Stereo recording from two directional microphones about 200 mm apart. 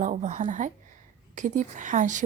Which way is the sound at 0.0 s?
40° right (ahead or behind).